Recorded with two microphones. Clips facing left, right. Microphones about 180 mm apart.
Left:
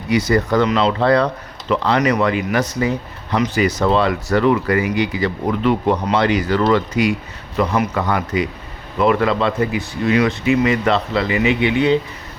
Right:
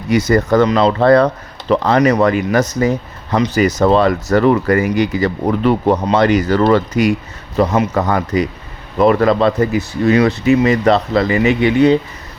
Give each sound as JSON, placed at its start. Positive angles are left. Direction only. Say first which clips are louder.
{"t": 0.1, "sound": "speech", "louder": "right 3 dB", "side_deg": -45}